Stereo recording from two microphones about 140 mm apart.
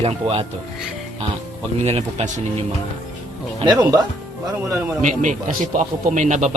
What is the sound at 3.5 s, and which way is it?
Music, 30° right (ahead or behind).